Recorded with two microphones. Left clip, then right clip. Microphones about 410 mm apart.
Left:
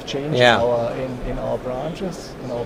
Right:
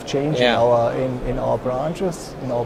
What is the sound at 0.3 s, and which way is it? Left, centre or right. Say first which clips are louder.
Speech: left 4 dB; left.